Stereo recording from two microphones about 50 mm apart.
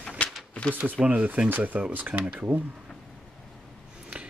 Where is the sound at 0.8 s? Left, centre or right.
Right.